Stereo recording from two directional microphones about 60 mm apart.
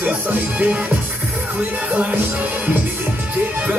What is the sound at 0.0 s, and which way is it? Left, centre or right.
Music, right.